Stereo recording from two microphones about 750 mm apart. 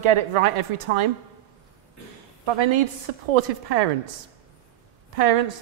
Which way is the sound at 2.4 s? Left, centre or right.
Right.